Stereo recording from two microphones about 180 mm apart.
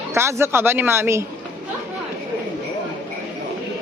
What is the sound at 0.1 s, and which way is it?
Speech, 15° right (ahead or behind).